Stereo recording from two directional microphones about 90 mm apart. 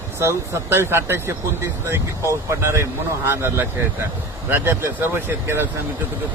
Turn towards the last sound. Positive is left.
turn(degrees=-25)  # may be behind; listen again after turning